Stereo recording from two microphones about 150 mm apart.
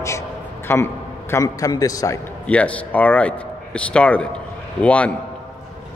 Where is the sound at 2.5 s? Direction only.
10° left (ahead or behind).